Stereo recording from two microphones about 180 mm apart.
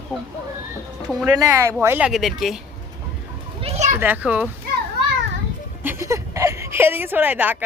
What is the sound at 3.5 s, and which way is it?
Children playing, 35° right (ahead or behind).